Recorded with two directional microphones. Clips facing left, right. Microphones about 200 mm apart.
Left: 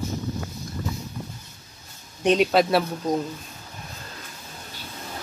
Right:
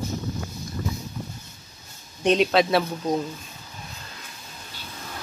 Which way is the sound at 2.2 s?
5° left (ahead or behind).